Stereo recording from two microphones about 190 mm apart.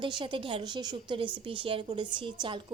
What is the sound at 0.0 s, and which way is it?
Speech, 25° right (ahead or behind).